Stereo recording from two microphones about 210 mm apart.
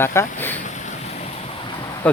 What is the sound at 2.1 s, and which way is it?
Speech, 5° left (ahead or behind).